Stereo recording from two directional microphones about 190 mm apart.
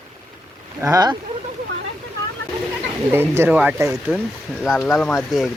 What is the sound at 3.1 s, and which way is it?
Speech, 10° right (ahead or behind).